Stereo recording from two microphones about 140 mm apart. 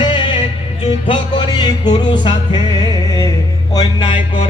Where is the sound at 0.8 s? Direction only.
35° left (ahead or behind).